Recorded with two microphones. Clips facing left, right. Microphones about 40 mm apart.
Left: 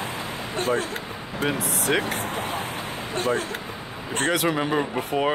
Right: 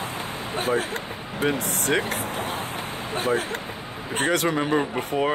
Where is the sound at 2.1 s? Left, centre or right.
Left.